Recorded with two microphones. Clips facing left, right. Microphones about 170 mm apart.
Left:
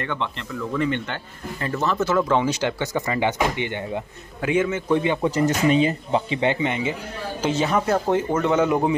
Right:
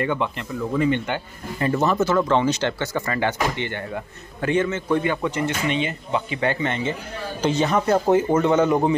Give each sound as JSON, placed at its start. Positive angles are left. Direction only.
{"t": 0.0, "sound": "a man's voice", "side_deg": -10}
{"t": 2.0, "sound": "speech", "side_deg": 5}
{"t": 5.2, "sound": "speech", "side_deg": 40}
{"t": 6.4, "sound": "speech", "side_deg": 15}